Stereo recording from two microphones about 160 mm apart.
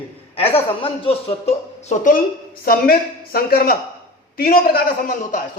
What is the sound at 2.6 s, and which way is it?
A man's voice, 70° left (ahead or behind).